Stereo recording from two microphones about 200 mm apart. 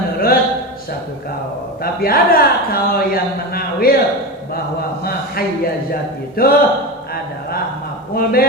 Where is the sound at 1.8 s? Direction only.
45° left (ahead or behind).